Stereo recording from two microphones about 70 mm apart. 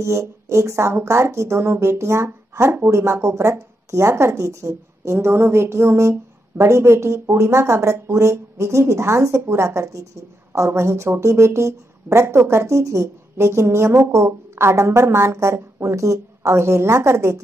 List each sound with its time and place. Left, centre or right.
0.0 s speech: right